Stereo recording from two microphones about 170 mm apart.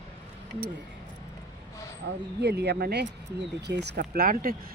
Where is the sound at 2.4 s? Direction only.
75° right (ahead or behind); by 4.5 s 60° right (ahead or behind).